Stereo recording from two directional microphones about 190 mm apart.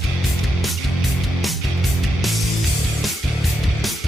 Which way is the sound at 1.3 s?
Centre (ahead or behind).